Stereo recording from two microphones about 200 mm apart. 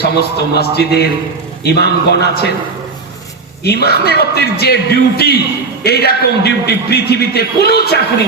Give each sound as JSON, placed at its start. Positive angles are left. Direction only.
{"t": 0.0, "sound": "a man's voice", "side_deg": 55}
{"t": 3.6, "sound": "a man's voice", "side_deg": 55}